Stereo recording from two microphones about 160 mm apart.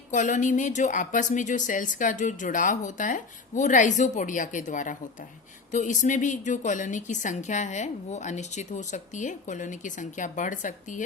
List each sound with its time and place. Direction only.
0.1 s a woman's voice: 50° left (ahead or behind)